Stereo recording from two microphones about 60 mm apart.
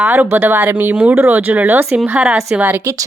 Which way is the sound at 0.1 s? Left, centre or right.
Right.